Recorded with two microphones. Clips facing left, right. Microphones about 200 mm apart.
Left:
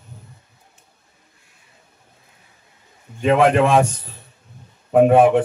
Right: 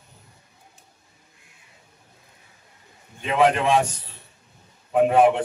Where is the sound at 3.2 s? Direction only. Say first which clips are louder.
Left 5 dB; 50° left (ahead or behind).